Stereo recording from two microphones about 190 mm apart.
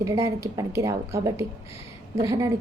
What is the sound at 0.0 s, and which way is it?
A woman's voice, 15° right (ahead or behind).